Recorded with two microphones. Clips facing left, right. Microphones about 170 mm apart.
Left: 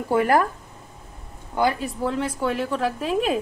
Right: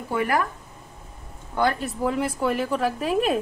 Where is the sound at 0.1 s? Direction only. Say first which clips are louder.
Left 5 dB; 35° left (ahead or behind).